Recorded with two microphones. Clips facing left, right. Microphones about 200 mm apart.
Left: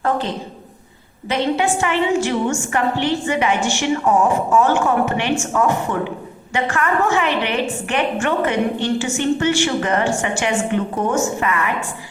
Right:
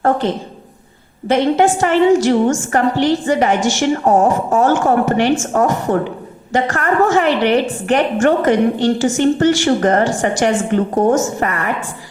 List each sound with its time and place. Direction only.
1.3 s a woman's voice: 45° right (ahead or behind)